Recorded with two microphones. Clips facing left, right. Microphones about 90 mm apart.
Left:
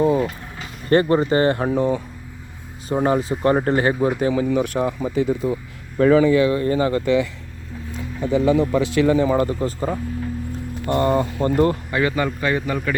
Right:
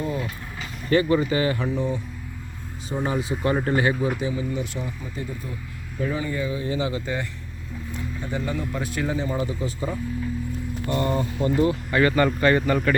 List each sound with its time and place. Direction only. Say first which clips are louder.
0.0 s vehicle: left 10 dB; 65° left (ahead or behind)
0.9 s speech: left 4 dB; 45° left (ahead or behind)
2.9 s speech: left 7 dB; 45° left (ahead or behind)
4.2 s speech: left 8 dB; 80° left; by 7.1 s 55° left (ahead or behind)
8.3 s a man's voice: left 12 dB; 90° left
9.5 s speech: left 5 dB; 50° left (ahead or behind)
11.9 s a man's voice: right 1 dB; 15° left (ahead or behind)